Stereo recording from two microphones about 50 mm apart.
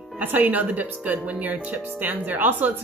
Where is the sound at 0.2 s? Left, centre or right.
Right.